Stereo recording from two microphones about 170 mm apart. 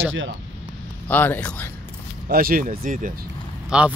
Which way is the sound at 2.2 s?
60° right (ahead or behind).